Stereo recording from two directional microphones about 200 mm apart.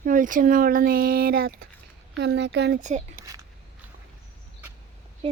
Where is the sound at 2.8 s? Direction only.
35° right (ahead or behind).